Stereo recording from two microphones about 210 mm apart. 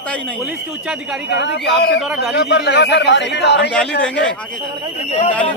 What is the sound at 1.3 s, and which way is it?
A man's voice, 55° left (ahead or behind).